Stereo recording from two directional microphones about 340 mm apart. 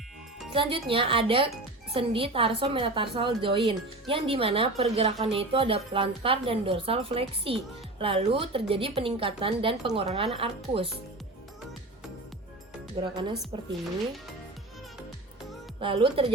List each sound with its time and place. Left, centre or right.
0.5 s a woman's voice: centre
13.0 s a woman's voice: centre
15.8 s a woman's voice: centre